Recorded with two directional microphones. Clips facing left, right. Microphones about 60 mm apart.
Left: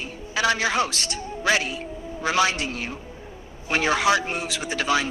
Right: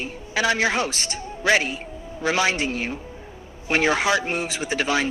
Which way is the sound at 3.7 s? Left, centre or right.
Centre.